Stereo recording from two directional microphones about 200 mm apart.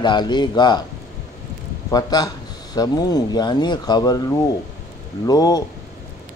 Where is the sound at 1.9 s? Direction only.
20° left (ahead or behind).